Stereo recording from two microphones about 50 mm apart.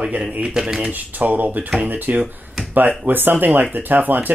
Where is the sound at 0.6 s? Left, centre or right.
Centre.